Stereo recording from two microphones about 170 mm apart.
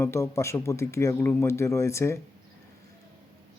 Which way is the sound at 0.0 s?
15° left (ahead or behind).